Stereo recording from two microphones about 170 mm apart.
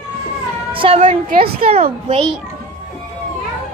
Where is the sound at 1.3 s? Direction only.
60° right (ahead or behind).